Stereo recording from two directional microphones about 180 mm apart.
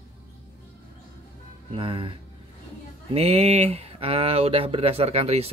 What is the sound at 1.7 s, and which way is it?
Speech, 30° right (ahead or behind).